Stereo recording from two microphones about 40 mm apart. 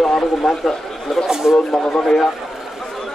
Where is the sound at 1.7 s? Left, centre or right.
Centre.